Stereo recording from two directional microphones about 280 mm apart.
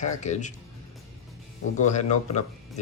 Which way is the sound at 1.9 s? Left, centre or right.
Left.